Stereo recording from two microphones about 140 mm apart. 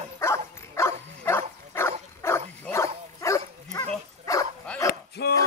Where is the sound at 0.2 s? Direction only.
20° left (ahead or behind).